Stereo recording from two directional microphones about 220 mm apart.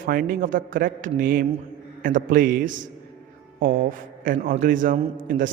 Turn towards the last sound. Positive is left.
turn(degrees=-35)  # may be behind; listen again after turning